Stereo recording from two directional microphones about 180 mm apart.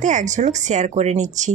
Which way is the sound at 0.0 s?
40° right (ahead or behind).